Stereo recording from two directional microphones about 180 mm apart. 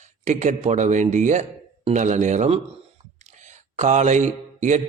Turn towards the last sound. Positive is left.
turn(degrees=-40)  # may be behind; listen again after turning